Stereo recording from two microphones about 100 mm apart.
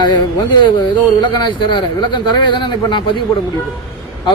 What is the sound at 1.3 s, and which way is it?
Speech, 50° left (ahead or behind).